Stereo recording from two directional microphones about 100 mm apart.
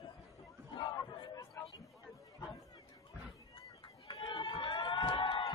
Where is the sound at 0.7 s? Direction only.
55° left (ahead or behind).